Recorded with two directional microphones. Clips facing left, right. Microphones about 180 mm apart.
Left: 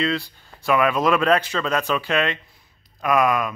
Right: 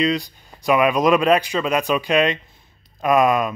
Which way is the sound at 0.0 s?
15° right (ahead or behind).